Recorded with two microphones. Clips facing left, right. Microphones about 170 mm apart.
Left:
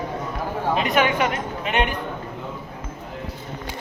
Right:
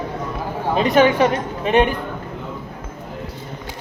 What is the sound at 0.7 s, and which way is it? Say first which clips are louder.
Speech: right 7 dB; 30° right (ahead or behind).